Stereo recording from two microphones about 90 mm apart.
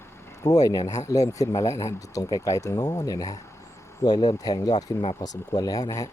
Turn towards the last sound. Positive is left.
turn(degrees=45)  # may be behind; listen again after turning